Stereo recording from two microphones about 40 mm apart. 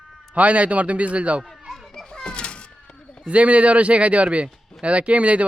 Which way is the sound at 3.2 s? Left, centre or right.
Right.